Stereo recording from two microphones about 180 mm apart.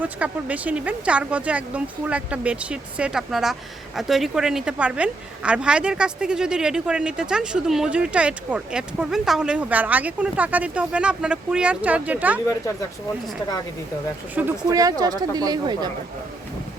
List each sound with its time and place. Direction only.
0.0 s speech: 10° right (ahead or behind)
14.4 s speech: 5° right (ahead or behind)
14.7 s speech: 20° right (ahead or behind)